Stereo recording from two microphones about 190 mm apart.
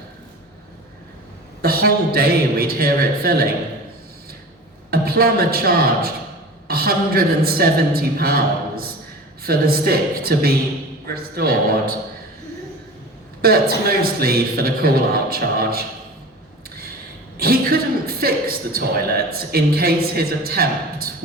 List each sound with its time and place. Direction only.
1.6 s a man's voice: 55° right (ahead or behind)
4.9 s a woman's voice: 55° right (ahead or behind)
13.4 s a man's voice: 55° right (ahead or behind)
17.3 s a man's voice: 55° right (ahead or behind)